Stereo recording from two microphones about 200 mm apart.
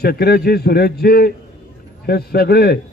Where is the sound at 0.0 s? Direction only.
50° left (ahead or behind).